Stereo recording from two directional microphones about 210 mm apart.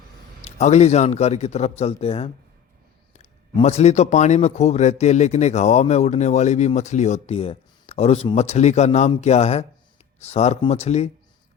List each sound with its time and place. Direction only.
0.4 s a man's voice: 30° left (ahead or behind)